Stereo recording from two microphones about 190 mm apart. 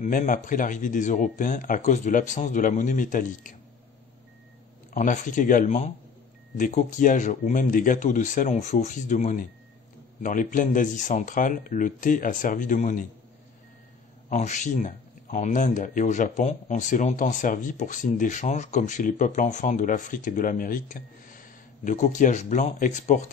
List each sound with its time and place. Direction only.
0.0 s speech: 40° left (ahead or behind)
4.9 s speech: 40° left (ahead or behind)
14.3 s speech: 40° left (ahead or behind)